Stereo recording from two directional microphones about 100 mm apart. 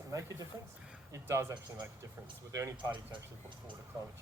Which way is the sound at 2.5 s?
30° right (ahead or behind).